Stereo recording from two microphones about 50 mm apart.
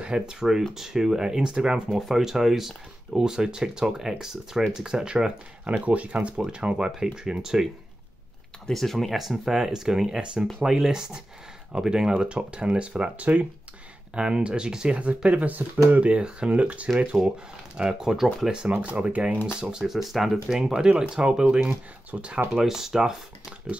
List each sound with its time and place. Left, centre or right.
0.0 s speech: centre
1.9 s speech: centre
8.6 s speech: centre; by 16.0 s right
16.0 s speech: right
17.7 s speech: centre
18.8 s speech: right
19.6 s speech: centre
20.5 s speech: centre
22.5 s speech: centre